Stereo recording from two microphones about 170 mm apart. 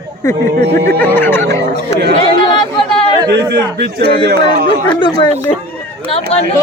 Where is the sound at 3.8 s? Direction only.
70° right (ahead or behind).